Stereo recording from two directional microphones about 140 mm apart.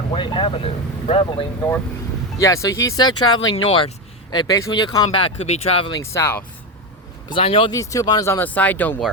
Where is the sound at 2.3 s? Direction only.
25° left (ahead or behind).